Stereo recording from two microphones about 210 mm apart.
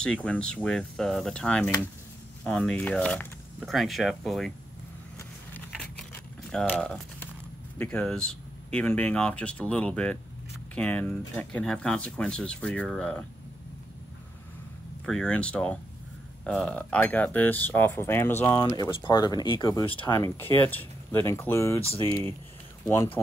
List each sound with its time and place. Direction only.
0.0 s speech: 5° left (ahead or behind)
6.5 s speech: 5° left (ahead or behind)
15.0 s speech: 5° left (ahead or behind)